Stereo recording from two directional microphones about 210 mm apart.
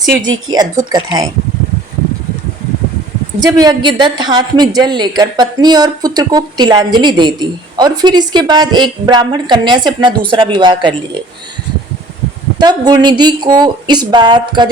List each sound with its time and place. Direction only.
0.2 s a woman's voice: 20° right (ahead or behind)
3.4 s a woman's voice: 20° right (ahead or behind)
12.5 s a woman's voice: 20° right (ahead or behind)